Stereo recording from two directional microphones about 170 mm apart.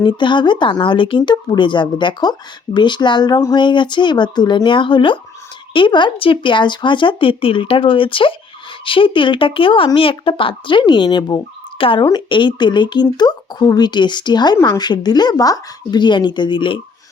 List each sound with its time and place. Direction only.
0.0 s speech: 25° left (ahead or behind)